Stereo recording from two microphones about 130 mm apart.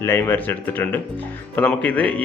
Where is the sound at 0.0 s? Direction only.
20° left (ahead or behind).